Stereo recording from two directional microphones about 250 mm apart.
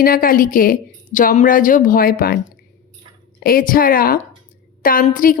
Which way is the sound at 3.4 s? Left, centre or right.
Left.